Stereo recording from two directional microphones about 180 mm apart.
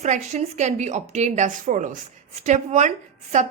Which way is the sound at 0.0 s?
40° right (ahead or behind).